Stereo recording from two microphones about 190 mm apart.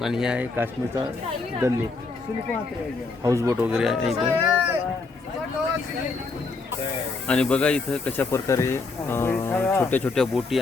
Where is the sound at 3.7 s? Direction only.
Centre (ahead or behind).